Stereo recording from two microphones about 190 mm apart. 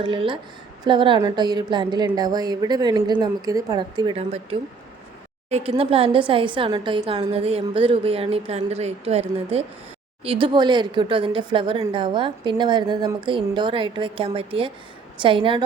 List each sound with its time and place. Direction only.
0.0 s a woman's voice: 25° right (ahead or behind)